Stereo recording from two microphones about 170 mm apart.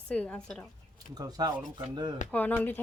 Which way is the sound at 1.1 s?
20° right (ahead or behind).